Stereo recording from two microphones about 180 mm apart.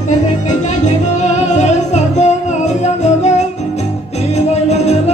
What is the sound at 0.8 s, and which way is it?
Music, 40° left (ahead or behind).